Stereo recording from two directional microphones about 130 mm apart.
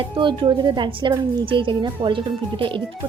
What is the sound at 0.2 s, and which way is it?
A woman's voice, 40° right (ahead or behind).